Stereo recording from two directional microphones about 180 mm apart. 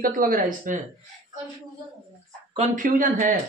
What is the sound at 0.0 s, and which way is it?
Speech, 50° right (ahead or behind).